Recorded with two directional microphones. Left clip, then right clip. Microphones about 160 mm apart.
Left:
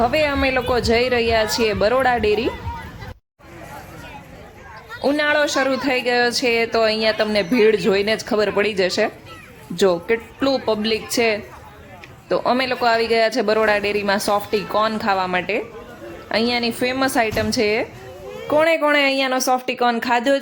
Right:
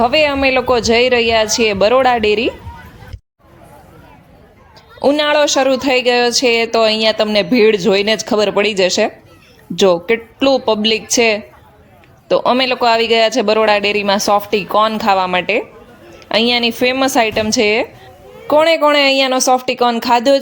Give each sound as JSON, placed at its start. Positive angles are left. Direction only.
{"t": 0.0, "sound": "speech", "side_deg": -20}
{"t": 4.9, "sound": "speech", "side_deg": -25}